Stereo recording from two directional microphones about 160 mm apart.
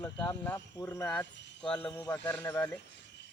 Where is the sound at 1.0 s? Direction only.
10° left (ahead or behind).